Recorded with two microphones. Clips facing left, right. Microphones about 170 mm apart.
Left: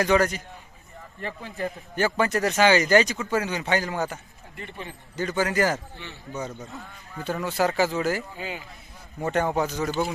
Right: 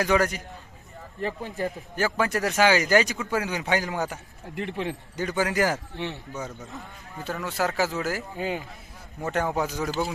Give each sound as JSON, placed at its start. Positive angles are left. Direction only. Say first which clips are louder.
{"t": 0.0, "sound": "speech", "louder": "left 2 dB", "side_deg": -5}
{"t": 2.0, "sound": "speech", "louder": "left 2 dB", "side_deg": -5}
{"t": 4.5, "sound": "speech", "louder": "right 8 dB", "side_deg": -90}
{"t": 5.1, "sound": "speech", "louder": "left 2 dB", "side_deg": -15}
{"t": 8.4, "sound": "speech", "louder": "right 5 dB", "side_deg": -50}
{"t": 9.2, "sound": "speech", "louder": "left 2 dB", "side_deg": 0}